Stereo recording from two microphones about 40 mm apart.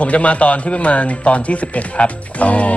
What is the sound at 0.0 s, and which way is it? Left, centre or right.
Speech, left.